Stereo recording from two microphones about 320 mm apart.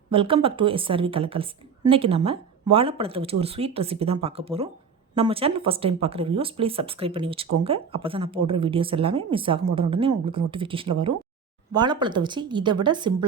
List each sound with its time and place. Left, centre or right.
0.1 s a woman's voice: centre